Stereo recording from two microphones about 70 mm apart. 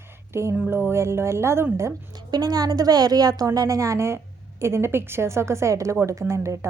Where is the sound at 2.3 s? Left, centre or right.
Right.